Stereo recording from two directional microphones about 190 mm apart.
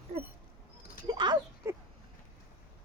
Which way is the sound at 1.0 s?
25° right (ahead or behind).